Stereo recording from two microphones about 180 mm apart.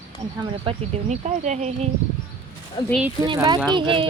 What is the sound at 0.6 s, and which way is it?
Speech, 35° right (ahead or behind).